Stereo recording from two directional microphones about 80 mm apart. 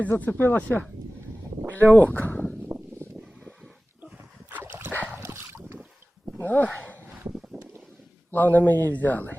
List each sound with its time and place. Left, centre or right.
0.1 s speech: left
1.9 s speech: centre
3.4 s a sound: centre
4.4 s dog: right
6.3 s speech: left
6.7 s a sound: centre
7.3 s wind: centre
8.3 s speech: left